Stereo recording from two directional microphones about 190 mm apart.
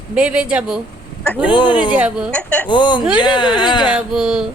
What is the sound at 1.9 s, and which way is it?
Speech, 5° right (ahead or behind).